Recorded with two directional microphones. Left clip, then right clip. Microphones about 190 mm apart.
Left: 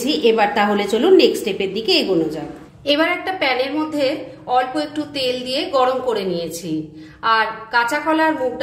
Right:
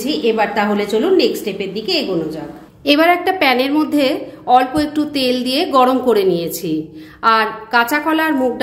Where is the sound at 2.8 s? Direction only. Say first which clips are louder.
Right 5 dB; 35° right (ahead or behind).